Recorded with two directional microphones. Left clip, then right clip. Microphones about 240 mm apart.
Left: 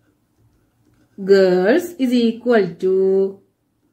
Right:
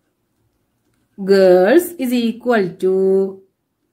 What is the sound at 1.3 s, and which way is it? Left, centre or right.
A woman's voice, right.